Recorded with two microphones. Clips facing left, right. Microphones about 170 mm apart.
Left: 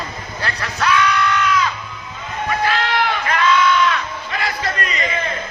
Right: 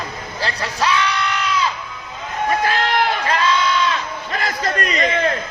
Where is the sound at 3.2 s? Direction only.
35° right (ahead or behind).